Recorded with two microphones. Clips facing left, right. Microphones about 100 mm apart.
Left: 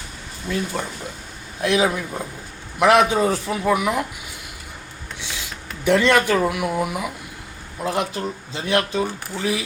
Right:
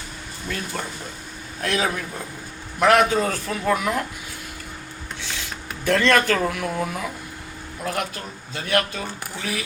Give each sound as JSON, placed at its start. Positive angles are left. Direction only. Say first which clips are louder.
{"t": 0.4, "sound": "speech", "louder": "left 5 dB", "side_deg": 15}
{"t": 5.8, "sound": "speech", "louder": "left 2 dB", "side_deg": 15}